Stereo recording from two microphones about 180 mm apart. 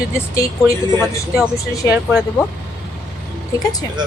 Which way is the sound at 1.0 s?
5° right (ahead or behind).